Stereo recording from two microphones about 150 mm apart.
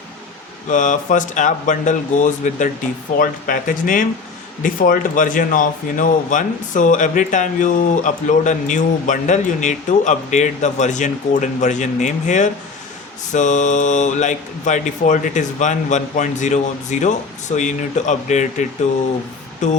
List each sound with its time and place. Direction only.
0.7 s speech: 60° left (ahead or behind)
3.2 s speech: 70° left (ahead or behind); by 18.6 s 55° left (ahead or behind)
19.6 s speech: 55° left (ahead or behind)